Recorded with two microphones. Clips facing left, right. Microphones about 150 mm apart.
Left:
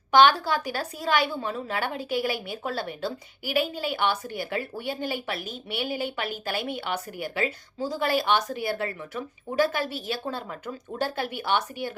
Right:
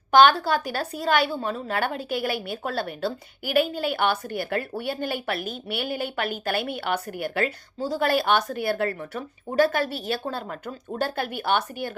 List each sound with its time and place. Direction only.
0.1 s a woman's voice: 50° right (ahead or behind)